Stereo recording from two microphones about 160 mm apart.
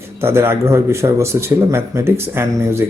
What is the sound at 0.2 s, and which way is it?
A man's voice, 15° right (ahead or behind).